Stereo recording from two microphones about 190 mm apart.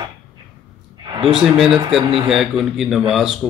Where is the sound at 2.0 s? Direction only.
30° right (ahead or behind).